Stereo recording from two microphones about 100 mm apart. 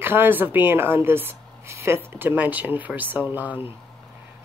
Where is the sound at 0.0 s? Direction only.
20° right (ahead or behind).